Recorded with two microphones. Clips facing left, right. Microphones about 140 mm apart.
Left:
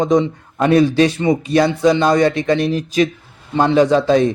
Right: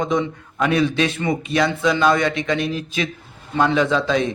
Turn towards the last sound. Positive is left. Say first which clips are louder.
# left 6 dB
turn(degrees=40)  # may be behind; listen again after turning